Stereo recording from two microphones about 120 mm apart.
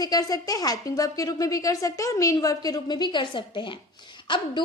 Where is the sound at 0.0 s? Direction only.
30° left (ahead or behind).